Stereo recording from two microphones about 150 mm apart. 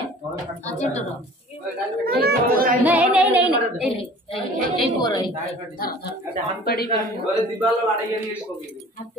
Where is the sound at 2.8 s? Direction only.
10° right (ahead or behind).